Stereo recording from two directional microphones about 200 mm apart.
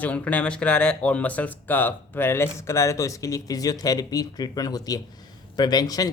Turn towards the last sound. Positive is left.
turn(degrees=20)  # may be behind; listen again after turning